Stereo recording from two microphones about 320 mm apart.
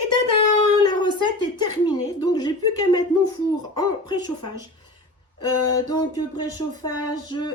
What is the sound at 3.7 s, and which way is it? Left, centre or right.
Speech, centre.